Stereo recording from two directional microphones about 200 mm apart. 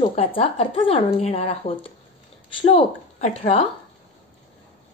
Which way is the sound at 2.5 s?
30° left (ahead or behind).